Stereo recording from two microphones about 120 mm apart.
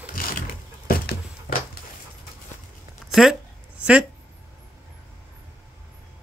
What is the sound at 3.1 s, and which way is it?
Speech, centre (ahead or behind).